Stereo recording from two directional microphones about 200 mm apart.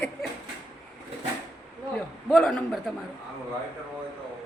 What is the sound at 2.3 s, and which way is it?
Speech, centre (ahead or behind).